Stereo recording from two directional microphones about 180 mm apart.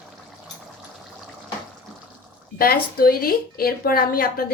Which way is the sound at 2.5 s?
55° left (ahead or behind).